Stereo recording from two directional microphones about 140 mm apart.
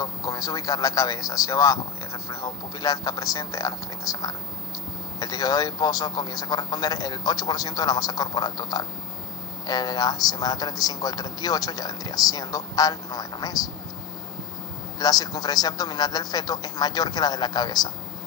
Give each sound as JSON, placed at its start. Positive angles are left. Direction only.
{"t": 0.0, "sound": "a man's voice", "side_deg": 25}
{"t": 14.9, "sound": "a man's voice", "side_deg": 30}